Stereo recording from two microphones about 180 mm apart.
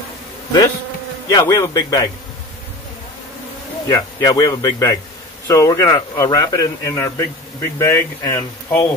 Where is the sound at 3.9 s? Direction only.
20° left (ahead or behind).